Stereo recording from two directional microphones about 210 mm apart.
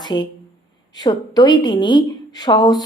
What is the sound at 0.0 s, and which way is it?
A woman's voice, 20° left (ahead or behind).